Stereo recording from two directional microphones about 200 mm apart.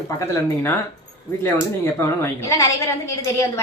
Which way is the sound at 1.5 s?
10° left (ahead or behind).